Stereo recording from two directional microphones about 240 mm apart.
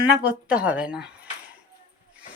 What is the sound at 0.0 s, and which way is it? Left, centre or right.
Speech, centre.